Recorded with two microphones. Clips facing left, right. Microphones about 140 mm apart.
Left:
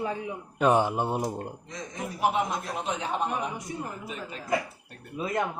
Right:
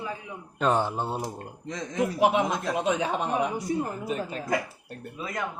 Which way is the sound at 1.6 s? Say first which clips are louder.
Right 8 dB; 85° right.